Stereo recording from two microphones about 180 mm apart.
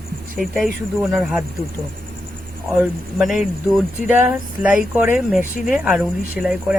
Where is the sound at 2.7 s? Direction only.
5° right (ahead or behind).